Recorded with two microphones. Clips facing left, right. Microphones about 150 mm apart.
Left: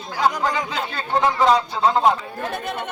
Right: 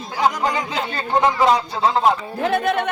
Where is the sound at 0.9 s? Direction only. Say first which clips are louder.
Right 2 dB; 20° right (ahead or behind).